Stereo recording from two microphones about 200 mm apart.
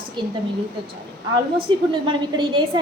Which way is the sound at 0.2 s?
25° right (ahead or behind).